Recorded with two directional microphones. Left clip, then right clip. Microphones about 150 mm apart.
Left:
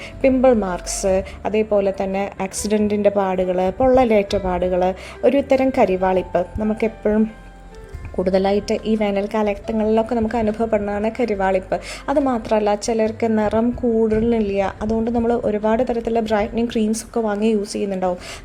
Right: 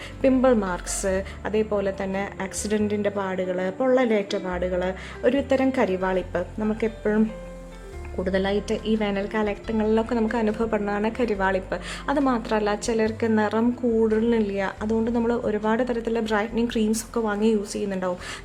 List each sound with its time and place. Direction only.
0.2 s a woman's voice: 15° left (ahead or behind)
8.2 s a woman's voice: 25° left (ahead or behind)